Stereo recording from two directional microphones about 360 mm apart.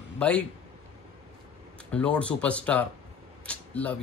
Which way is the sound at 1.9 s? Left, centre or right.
Centre.